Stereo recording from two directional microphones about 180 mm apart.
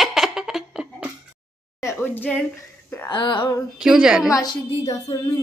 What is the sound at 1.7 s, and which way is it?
Speech, 15° left (ahead or behind).